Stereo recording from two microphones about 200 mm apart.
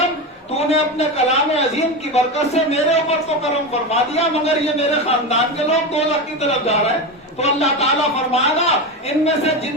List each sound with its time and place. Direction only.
0.7 s a man's voice: 35° left (ahead or behind)